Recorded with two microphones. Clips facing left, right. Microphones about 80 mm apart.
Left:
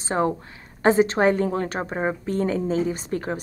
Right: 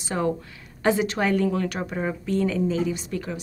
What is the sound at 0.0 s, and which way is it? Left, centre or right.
A woman's voice, left.